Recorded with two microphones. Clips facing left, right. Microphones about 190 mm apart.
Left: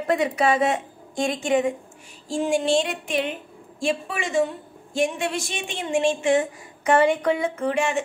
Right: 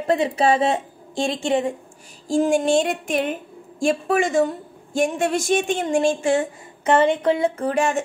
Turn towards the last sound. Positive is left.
turn(degrees=-45)  # may be behind; listen again after turning